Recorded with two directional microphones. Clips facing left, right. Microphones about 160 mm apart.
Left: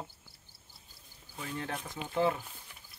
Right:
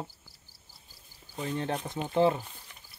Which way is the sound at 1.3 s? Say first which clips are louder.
Right 6 dB; 30° right (ahead or behind).